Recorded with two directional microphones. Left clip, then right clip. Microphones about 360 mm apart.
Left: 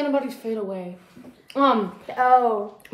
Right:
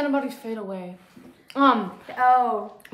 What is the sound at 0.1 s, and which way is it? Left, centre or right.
A woman's voice, centre.